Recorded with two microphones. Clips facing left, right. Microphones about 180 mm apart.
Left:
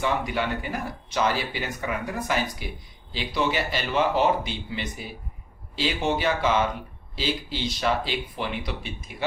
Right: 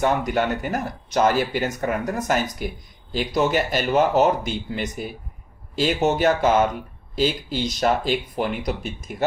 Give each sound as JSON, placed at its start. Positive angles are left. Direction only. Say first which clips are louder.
{"t": 0.0, "sound": "speech", "louder": "right 5 dB", "side_deg": -45}